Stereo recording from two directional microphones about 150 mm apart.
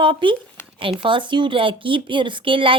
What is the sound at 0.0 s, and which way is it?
Speech, 35° right (ahead or behind).